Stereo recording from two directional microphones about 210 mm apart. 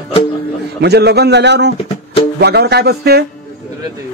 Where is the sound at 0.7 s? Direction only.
50° right (ahead or behind).